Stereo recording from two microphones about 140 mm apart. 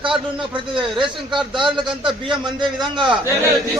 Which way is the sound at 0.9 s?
35° right (ahead or behind).